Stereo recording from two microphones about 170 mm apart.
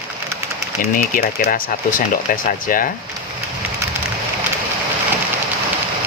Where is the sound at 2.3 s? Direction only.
55° left (ahead or behind).